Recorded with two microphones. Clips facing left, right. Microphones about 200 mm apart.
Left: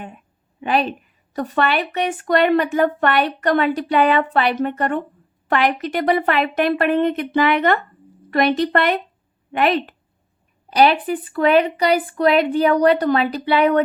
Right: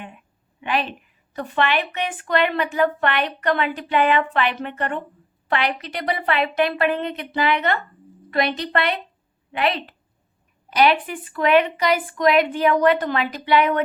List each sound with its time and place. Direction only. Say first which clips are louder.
0.6 s a woman's voice: left 5 dB; 40° left (ahead or behind)
10.7 s speech: left 3 dB; 35° left (ahead or behind)